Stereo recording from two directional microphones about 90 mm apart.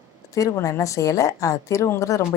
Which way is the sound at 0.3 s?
35° left (ahead or behind).